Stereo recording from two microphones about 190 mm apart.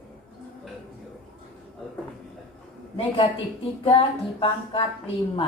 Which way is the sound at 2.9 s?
30° left (ahead or behind).